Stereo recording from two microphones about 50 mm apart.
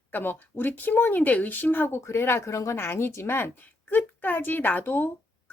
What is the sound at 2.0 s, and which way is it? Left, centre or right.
Speech, left.